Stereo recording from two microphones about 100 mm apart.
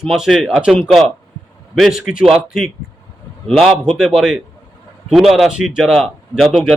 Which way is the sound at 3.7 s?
5° right (ahead or behind).